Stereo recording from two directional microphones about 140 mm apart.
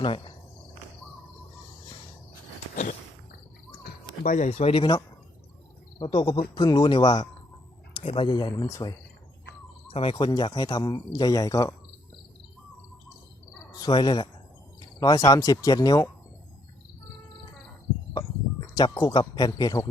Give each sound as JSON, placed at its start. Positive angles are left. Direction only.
{"t": 0.0, "sound": "speech", "side_deg": 40}
{"t": 3.8, "sound": "speech", "side_deg": 75}
{"t": 7.9, "sound": "speech", "side_deg": 40}
{"t": 9.9, "sound": "speech", "side_deg": 40}
{"t": 13.7, "sound": "speech", "side_deg": 30}
{"t": 18.7, "sound": "speech", "side_deg": 30}